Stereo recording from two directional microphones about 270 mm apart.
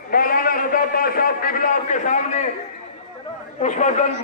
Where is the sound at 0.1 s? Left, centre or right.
Left.